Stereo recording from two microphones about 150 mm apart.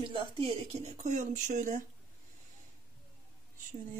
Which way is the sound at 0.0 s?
30° right (ahead or behind).